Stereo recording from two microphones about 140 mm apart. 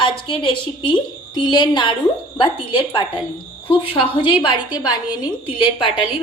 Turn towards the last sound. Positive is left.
turn(degrees=40)  # may be behind; listen again after turning